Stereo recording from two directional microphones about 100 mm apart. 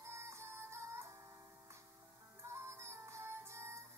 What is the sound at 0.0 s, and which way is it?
Music, 30° right (ahead or behind).